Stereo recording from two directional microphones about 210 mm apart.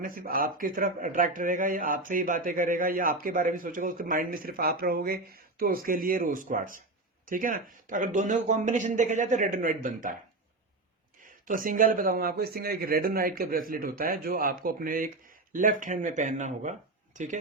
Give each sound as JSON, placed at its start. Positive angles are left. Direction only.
{"t": 0.0, "sound": "speech", "side_deg": -45}
{"t": 11.4, "sound": "speech", "side_deg": -40}